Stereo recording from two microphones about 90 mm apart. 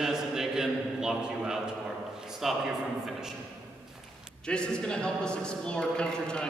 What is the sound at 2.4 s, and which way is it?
Speech, 5° right (ahead or behind).